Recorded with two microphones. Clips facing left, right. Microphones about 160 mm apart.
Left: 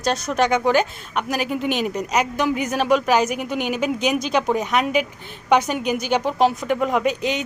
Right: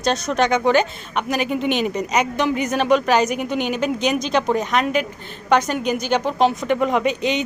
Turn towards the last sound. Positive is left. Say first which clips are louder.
# right 1 dB
turn(degrees=5)  # may be behind; listen again after turning